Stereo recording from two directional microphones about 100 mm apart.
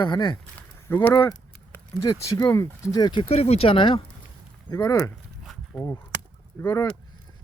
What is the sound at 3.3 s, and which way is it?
Speech, 85° left.